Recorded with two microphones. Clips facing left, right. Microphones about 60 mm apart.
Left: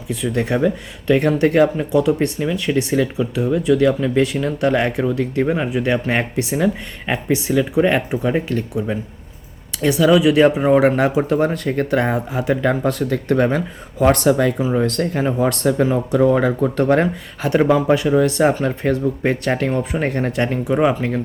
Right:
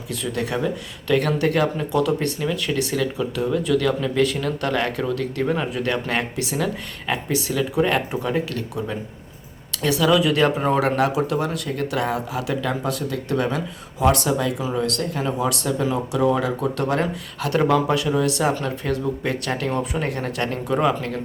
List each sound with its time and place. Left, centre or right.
0.3 s speech: left
14.6 s speech: left; by 21.1 s centre